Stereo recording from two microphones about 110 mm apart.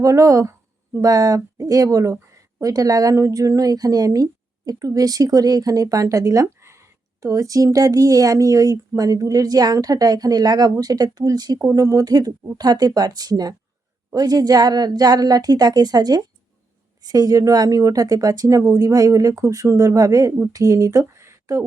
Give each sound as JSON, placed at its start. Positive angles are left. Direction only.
{"t": 0.0, "sound": "speech", "side_deg": -30}